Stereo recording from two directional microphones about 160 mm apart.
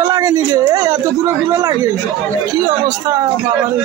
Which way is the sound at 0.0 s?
25° right (ahead or behind).